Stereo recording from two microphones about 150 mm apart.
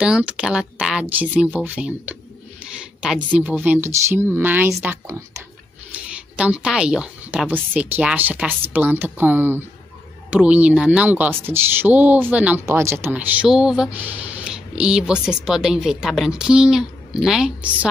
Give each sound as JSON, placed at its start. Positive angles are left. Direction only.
{"t": 0.0, "sound": "speech", "side_deg": -5}
{"t": 6.3, "sound": "speech", "side_deg": -5}